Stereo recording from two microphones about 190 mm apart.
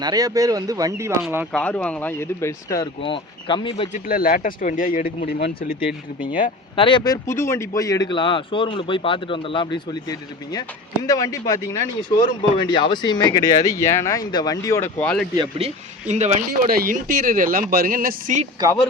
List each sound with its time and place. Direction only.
0.0 s speech: 20° right (ahead or behind)
1.5 s speech: 5° left (ahead or behind); by 3.8 s 25° left (ahead or behind)
4.0 s speech: 50° left (ahead or behind)
6.7 s speech: 25° left (ahead or behind); by 15.3 s 5° left (ahead or behind)
15.4 s speech: 30° right (ahead or behind)
16.6 s speech: 50° right (ahead or behind)